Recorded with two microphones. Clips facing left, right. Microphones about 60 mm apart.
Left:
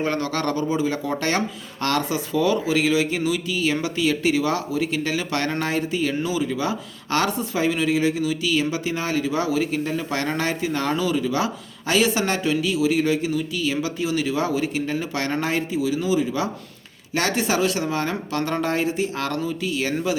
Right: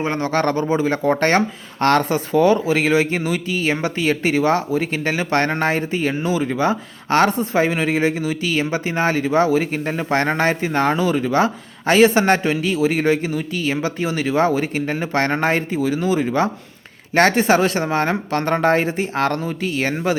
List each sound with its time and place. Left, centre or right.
0.0 s speech: right